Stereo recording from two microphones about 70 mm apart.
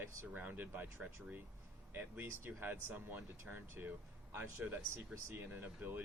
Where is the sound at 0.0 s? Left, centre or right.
Right.